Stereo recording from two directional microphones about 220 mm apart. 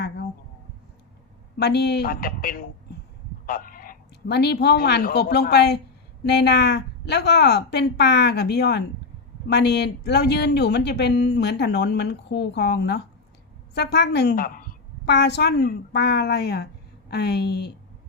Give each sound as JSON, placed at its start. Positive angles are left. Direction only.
{"t": 1.5, "sound": "a woman's voice", "side_deg": 50}